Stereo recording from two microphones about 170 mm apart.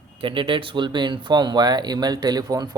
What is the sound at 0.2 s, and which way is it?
Speech, 30° right (ahead or behind).